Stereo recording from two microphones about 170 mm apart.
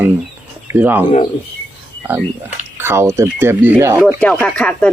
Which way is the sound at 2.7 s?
15° right (ahead or behind).